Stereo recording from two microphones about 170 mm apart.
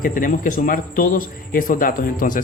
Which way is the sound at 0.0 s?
55° left (ahead or behind).